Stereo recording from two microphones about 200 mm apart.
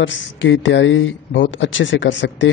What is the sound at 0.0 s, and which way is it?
A man's voice, 70° left (ahead or behind).